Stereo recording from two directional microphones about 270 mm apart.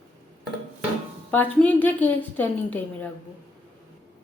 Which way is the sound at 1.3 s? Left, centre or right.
Centre.